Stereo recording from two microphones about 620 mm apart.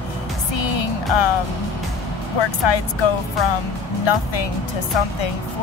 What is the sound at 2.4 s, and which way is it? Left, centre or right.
Speech, left.